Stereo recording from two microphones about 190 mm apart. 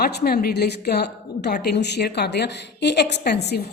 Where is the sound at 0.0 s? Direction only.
55° left (ahead or behind).